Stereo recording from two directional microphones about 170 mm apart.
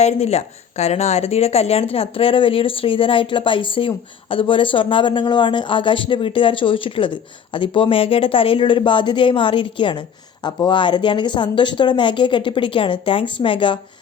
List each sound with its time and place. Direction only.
0.0 s speech: 40° left (ahead or behind)